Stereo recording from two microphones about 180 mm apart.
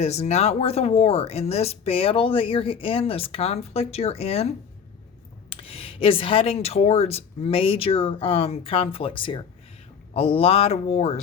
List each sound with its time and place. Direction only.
0.0 s speech: 35° left (ahead or behind)